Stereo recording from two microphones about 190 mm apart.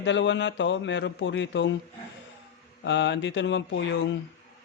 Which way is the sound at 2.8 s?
70° left (ahead or behind).